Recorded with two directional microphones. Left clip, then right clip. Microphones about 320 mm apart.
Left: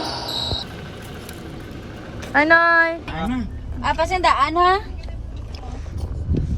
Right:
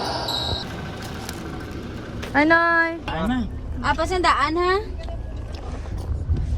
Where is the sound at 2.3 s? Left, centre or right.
Centre.